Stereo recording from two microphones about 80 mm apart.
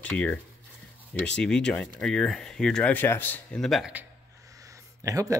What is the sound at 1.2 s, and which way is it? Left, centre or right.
Speech, centre.